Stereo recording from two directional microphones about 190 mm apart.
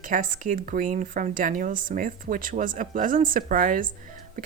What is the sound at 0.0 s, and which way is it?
Speech, 45° right (ahead or behind).